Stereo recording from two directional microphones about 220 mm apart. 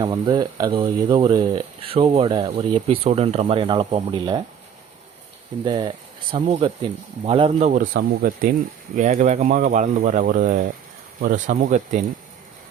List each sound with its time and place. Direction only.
0.0 s speech: 20° right (ahead or behind)
5.6 s speech: 20° right (ahead or behind); by 12.0 s 35° right (ahead or behind)